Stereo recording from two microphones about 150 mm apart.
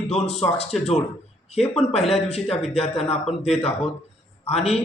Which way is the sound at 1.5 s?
45° left (ahead or behind).